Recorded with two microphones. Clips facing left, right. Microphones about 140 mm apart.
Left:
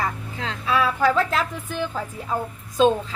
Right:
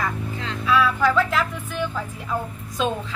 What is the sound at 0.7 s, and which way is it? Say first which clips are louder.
Speech: right 1 dB; 35° left (ahead or behind).